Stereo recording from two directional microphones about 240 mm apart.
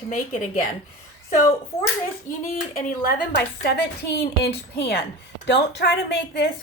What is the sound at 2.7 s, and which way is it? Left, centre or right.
A woman's voice, left.